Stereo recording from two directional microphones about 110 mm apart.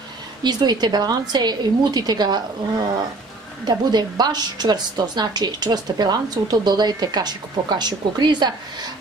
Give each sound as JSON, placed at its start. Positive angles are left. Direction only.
{"t": 0.4, "sound": "a woman's voice", "side_deg": -40}
{"t": 3.6, "sound": "a woman's voice", "side_deg": -40}